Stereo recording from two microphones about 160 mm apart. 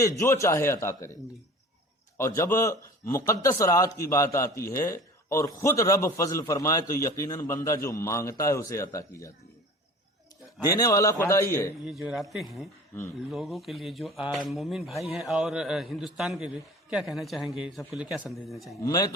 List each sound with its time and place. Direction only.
0.0 s a man's voice: 20° left (ahead or behind)
2.1 s a man's voice: 15° left (ahead or behind)
10.6 s a man's voice: 20° left (ahead or behind)
11.9 s a man's voice: centre (ahead or behind)
18.8 s a man's voice: 20° left (ahead or behind)